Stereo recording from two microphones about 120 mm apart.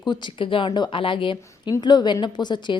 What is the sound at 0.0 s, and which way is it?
A woman's voice, 40° left (ahead or behind).